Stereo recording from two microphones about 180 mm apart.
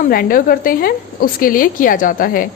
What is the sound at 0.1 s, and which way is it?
A woman's voice, 50° left (ahead or behind).